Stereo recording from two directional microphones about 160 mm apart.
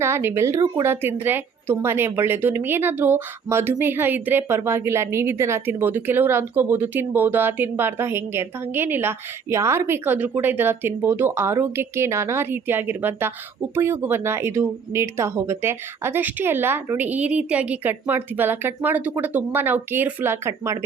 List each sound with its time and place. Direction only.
0.0 s a woman's voice: 15° right (ahead or behind)